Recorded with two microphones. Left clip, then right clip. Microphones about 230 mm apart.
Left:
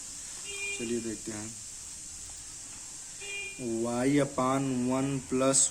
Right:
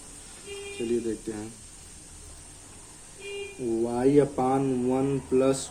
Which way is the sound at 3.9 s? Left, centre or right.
Left.